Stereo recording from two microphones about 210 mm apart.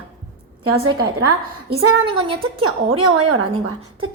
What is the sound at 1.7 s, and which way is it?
A woman's voice, 25° right (ahead or behind).